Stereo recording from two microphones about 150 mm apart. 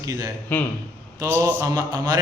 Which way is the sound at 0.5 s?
10° left (ahead or behind).